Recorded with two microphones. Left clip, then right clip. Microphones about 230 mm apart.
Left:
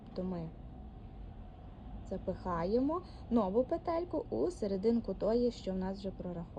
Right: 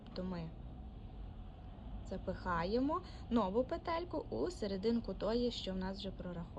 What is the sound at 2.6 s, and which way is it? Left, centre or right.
Speech, centre.